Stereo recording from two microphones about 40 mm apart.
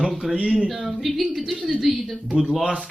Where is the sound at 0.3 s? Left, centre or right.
Right.